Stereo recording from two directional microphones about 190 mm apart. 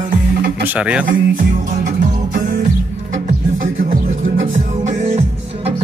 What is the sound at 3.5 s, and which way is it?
Music, 45° right (ahead or behind).